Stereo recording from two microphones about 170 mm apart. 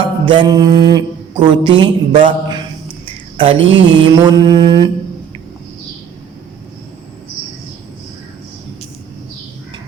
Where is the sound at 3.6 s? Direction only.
90° right.